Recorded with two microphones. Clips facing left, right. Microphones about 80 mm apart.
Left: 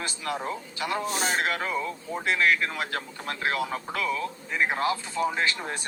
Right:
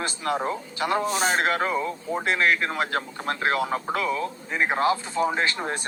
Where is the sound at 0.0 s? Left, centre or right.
Right.